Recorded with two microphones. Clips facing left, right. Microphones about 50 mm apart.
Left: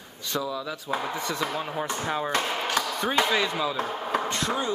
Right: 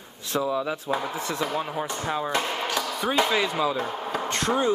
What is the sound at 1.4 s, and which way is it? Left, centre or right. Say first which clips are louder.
Speech: right 1 dB; centre.